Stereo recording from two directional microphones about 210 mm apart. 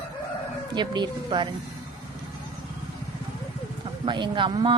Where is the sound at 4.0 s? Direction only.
20° right (ahead or behind).